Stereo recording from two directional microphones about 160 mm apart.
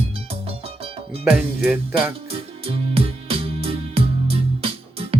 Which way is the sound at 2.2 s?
35° right (ahead or behind).